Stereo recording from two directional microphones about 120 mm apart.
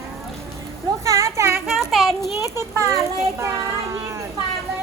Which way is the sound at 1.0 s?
25° right (ahead or behind).